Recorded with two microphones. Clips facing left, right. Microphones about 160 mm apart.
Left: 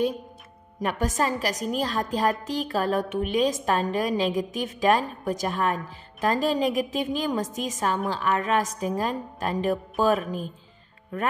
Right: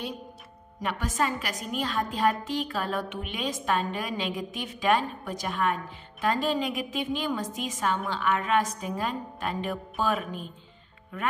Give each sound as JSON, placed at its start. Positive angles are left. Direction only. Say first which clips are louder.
{"t": 0.7, "sound": "a woman's voice", "louder": "left 3 dB", "side_deg": 45}